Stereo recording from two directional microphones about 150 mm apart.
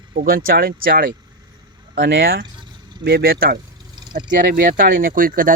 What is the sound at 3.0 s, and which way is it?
Speech, 90° right.